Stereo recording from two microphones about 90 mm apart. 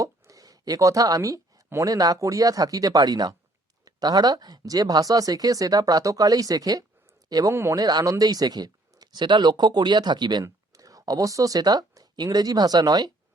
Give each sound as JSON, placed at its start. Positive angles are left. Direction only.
{"t": 0.0, "sound": "speech", "side_deg": -40}
{"t": 7.5, "sound": "speech", "side_deg": -30}
{"t": 7.8, "sound": "speech", "side_deg": -45}
{"t": 10.4, "sound": "speech", "side_deg": -40}